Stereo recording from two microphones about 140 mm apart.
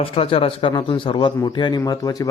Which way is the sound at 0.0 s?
45° left (ahead or behind).